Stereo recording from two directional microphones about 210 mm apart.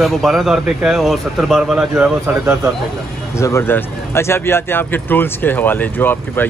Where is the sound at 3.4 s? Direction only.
10° left (ahead or behind).